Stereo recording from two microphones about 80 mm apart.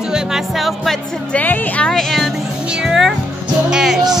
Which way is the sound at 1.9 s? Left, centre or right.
Centre.